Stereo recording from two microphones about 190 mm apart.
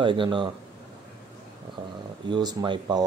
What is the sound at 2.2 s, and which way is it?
Speech, 25° right (ahead or behind).